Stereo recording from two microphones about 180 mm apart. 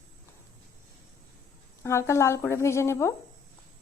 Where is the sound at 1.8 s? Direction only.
15° left (ahead or behind).